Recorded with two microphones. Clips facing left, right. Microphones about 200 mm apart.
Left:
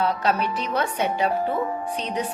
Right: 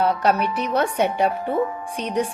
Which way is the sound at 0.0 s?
60° right (ahead or behind).